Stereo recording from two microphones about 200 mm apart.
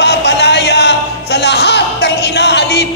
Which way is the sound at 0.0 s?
55° left (ahead or behind).